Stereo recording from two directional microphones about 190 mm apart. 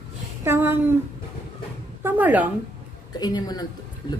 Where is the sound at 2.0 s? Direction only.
10° right (ahead or behind).